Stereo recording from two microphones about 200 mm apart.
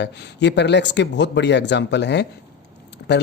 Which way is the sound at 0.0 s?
60° left (ahead or behind).